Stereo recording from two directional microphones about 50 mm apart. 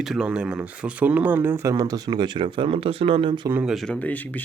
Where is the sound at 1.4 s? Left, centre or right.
Right.